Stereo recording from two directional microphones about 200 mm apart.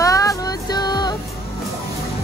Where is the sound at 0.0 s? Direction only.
15° left (ahead or behind).